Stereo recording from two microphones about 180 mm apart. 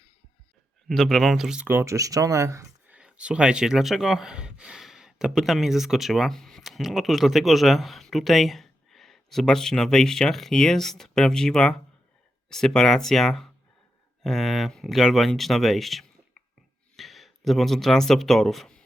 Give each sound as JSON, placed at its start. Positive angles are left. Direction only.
{"t": 0.9, "sound": "speech", "side_deg": 5}
{"t": 3.0, "sound": "speech", "side_deg": -5}